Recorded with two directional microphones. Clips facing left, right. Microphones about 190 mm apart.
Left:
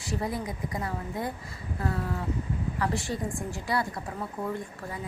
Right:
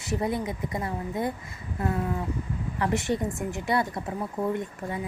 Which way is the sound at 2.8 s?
20° right (ahead or behind).